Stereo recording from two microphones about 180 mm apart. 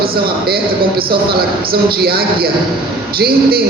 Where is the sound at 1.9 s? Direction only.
55° right (ahead or behind).